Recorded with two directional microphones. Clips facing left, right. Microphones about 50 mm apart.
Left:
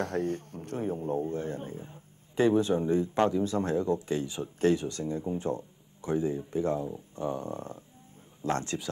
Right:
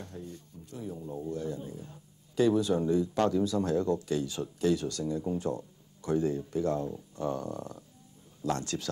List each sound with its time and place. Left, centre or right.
0.0 s speech: left
1.8 s a man's voice: left